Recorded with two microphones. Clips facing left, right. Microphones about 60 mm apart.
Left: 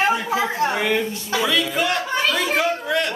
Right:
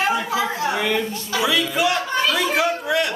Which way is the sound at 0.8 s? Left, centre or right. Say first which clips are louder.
Left 1 dB; centre.